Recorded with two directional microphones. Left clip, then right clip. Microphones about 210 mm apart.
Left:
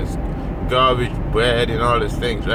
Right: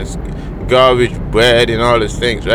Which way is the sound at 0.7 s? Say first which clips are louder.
Right 7 dB; 45° right (ahead or behind).